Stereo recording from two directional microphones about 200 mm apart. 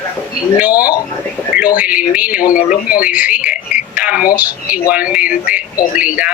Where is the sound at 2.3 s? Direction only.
45° left (ahead or behind).